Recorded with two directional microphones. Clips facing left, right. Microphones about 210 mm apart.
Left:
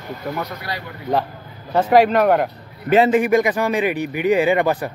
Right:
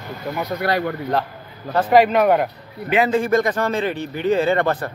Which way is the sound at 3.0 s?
15° left (ahead or behind).